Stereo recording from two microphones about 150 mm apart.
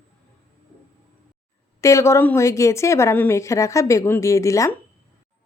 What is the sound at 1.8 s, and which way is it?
A woman's voice, 20° left (ahead or behind).